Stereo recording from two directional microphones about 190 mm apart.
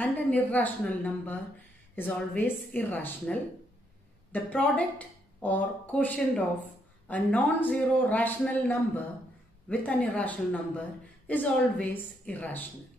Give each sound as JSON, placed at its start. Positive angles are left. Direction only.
{"t": 0.0, "sound": "speech", "side_deg": 10}